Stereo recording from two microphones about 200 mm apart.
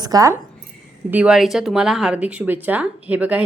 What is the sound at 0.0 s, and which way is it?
Speech, 20° right (ahead or behind).